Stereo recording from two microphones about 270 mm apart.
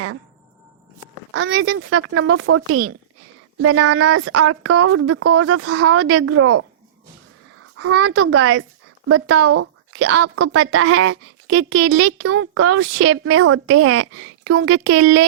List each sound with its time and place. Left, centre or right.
1.3 s a woman's voice: right
1.6 s a woman's voice: right